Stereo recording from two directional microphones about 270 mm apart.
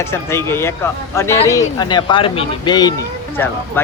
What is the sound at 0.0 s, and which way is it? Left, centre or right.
Speech, centre.